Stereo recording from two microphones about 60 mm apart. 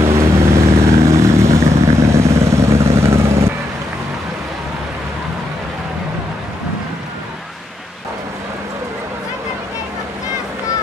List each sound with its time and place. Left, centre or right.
0.0 s vehicle: right